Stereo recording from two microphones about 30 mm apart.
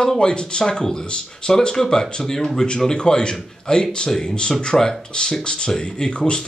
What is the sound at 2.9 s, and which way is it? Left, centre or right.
Speech, left.